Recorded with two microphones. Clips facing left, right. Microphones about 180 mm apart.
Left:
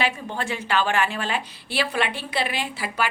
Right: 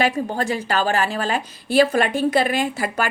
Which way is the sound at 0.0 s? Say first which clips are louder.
Right 6 dB; 40° right (ahead or behind).